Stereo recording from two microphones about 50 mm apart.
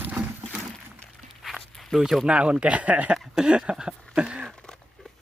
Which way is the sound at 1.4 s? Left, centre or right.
Centre.